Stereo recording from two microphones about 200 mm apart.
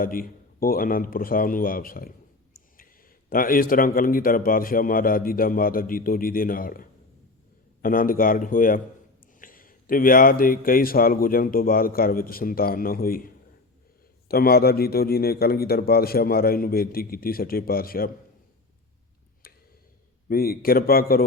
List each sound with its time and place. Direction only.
0.0 s speech: 45° left (ahead or behind)
20.2 s speech: 50° left (ahead or behind)